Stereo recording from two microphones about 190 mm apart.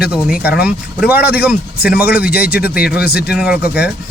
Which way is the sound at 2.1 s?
55° left (ahead or behind).